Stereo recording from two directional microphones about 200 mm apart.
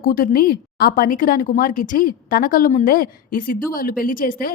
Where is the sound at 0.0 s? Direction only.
45° left (ahead or behind).